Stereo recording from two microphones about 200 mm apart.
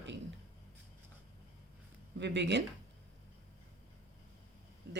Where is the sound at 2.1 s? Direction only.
60° right (ahead or behind).